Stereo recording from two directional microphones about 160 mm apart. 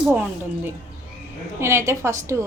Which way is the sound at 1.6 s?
15° right (ahead or behind).